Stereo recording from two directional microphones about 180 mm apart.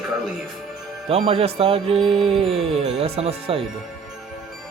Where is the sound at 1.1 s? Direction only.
35° right (ahead or behind).